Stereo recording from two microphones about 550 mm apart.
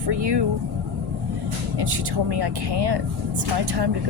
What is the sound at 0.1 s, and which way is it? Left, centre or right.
Speech, right.